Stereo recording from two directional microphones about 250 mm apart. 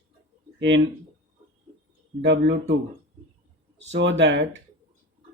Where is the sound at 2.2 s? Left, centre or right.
Right.